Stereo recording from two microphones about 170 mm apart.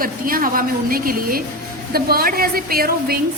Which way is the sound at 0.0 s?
55° right (ahead or behind).